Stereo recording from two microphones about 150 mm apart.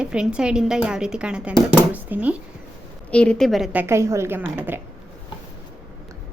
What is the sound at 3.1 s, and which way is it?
Speech, 5° left (ahead or behind).